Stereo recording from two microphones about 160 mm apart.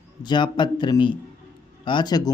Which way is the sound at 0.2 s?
30° left (ahead or behind).